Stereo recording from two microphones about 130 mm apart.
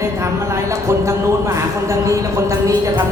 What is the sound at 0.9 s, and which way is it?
A man's voice, 25° right (ahead or behind).